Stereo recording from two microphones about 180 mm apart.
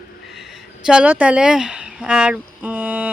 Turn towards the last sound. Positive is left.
turn(degrees=-10)  # may be behind; listen again after turning